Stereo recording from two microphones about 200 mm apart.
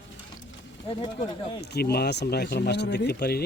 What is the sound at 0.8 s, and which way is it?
Speech, 25° left (ahead or behind).